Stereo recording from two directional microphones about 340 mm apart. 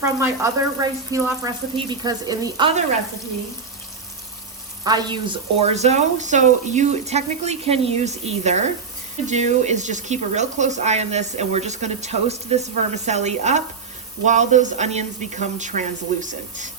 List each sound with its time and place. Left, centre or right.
0.0 s speech: centre
4.8 s speech: centre